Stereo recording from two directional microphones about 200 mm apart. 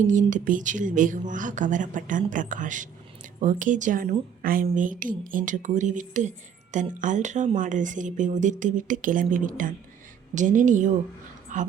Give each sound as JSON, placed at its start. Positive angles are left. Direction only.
{"t": 0.1, "sound": "a woman's voice", "side_deg": -40}